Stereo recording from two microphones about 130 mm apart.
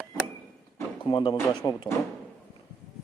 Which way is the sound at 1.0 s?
40° left (ahead or behind).